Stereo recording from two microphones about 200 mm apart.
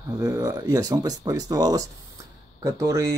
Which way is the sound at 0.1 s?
20° right (ahead or behind).